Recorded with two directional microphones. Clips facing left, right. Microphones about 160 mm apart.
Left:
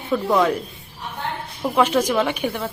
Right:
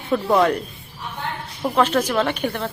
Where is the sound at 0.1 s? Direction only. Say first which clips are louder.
Right 1 dB; centre (ahead or behind).